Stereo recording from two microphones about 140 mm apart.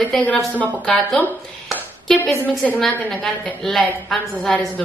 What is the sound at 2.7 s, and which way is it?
A woman's voice, 5° left (ahead or behind).